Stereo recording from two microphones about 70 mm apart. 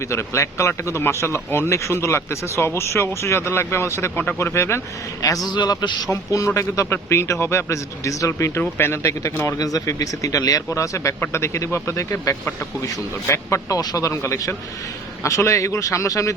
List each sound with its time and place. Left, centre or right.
0.1 s a man's voice: left
5.5 s a man's voice: left
6.1 s a man's voice: left
9.6 s a man's voice: left
14.1 s a man's voice: left